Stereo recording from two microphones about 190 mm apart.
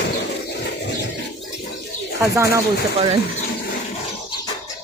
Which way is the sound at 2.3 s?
15° right (ahead or behind).